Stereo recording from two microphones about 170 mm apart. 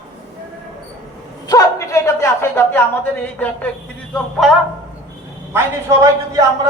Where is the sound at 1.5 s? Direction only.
20° left (ahead or behind); by 4.5 s centre (ahead or behind).